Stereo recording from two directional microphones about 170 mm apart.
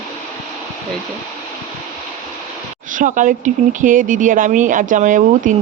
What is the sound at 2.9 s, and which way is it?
Speech, 50° right (ahead or behind).